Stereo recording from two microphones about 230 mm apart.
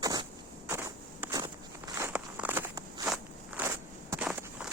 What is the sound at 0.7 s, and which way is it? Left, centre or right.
Walk, centre.